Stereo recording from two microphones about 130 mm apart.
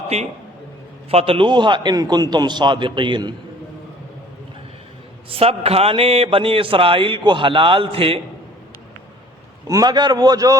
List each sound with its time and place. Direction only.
0.1 s a man's voice: 50° right (ahead or behind)
5.3 s a man's voice: 50° right (ahead or behind)
9.6 s a man's voice: 30° right (ahead or behind)